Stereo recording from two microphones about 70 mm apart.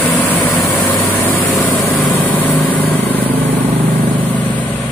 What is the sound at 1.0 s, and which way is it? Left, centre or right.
Vehicle, left.